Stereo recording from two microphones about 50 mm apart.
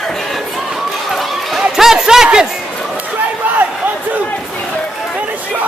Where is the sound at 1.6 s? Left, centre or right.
Centre.